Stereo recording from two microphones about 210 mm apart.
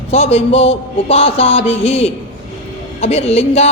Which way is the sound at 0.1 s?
30° left (ahead or behind).